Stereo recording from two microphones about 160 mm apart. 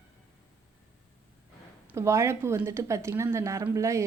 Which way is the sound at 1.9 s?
15° right (ahead or behind).